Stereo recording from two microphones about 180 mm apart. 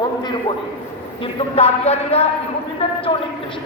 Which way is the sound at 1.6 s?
35° left (ahead or behind).